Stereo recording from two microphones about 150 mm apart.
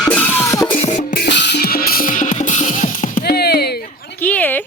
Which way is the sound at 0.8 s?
50° left (ahead or behind).